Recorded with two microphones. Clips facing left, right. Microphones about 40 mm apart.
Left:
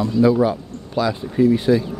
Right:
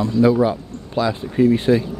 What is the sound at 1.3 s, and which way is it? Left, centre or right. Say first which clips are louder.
Speech: even; right.